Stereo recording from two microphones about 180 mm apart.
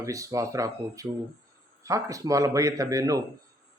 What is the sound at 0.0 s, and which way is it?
A man's voice, 15° right (ahead or behind).